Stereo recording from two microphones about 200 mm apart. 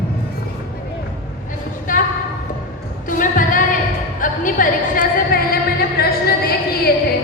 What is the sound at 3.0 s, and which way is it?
Music, 40° left (ahead or behind).